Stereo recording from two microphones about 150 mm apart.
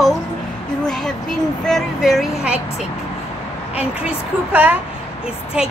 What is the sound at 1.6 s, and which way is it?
Speech, centre (ahead or behind).